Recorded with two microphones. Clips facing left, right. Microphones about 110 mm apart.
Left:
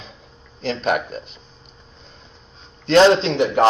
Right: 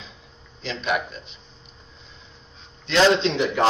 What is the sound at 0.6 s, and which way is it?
Speech, 45° left (ahead or behind).